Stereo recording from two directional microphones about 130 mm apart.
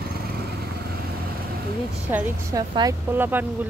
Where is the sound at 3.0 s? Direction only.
15° right (ahead or behind).